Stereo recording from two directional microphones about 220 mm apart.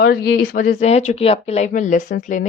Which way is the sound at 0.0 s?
45° left (ahead or behind).